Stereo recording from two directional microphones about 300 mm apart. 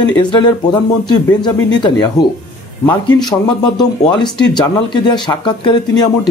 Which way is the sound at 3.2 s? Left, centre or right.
Centre.